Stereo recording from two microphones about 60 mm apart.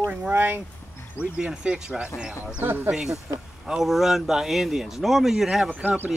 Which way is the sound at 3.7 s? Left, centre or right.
Centre.